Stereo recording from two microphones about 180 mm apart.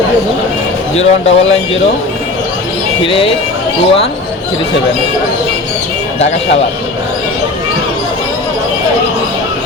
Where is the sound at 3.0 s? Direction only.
30° left (ahead or behind).